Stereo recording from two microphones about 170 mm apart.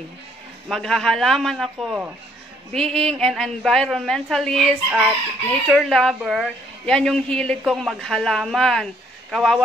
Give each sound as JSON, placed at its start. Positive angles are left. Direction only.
{"t": 0.7, "sound": "a woman's voice", "side_deg": 0}